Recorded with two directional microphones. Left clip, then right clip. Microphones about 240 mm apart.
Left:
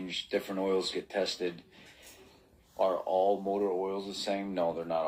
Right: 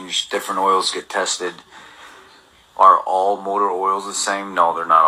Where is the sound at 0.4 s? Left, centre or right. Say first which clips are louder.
Right 15 dB; right.